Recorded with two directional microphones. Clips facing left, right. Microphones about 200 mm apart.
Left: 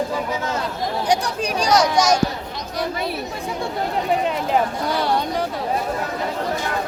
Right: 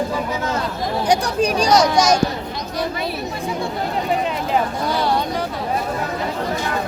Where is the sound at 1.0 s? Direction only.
45° right (ahead or behind).